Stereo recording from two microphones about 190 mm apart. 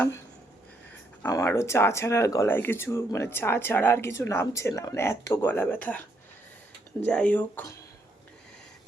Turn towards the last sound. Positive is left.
turn(degrees=10)  # may be behind; listen again after turning